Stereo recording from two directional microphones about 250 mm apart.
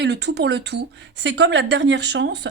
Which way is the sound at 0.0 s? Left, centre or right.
Right.